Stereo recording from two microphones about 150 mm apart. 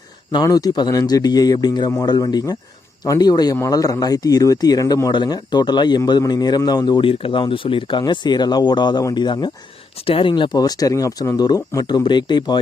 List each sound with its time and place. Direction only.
0.3 s speech: 25° left (ahead or behind)